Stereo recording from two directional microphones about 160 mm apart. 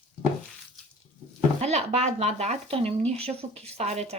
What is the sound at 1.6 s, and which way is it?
Speech, 40° right (ahead or behind).